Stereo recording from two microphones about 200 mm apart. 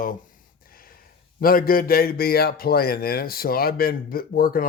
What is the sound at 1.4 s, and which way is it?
Speech, 45° left (ahead or behind).